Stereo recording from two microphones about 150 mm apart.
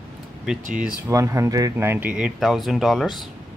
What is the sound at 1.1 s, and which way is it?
Speech, 20° right (ahead or behind).